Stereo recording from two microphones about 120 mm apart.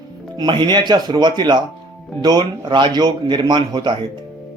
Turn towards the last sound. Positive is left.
turn(degrees=-40)  # may be behind; listen again after turning